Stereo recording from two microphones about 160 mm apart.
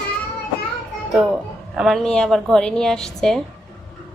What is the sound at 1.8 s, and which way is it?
A woman's voice, centre (ahead or behind).